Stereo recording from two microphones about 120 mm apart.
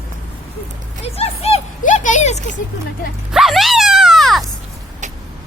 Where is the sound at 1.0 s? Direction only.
55° left (ahead or behind); by 2.4 s 85° left.